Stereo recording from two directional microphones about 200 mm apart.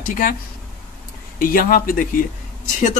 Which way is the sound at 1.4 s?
45° left (ahead or behind).